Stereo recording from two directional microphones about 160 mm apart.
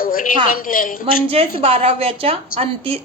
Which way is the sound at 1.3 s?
35° right (ahead or behind).